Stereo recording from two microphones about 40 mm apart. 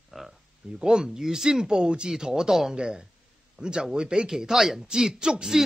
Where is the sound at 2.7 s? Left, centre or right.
Right.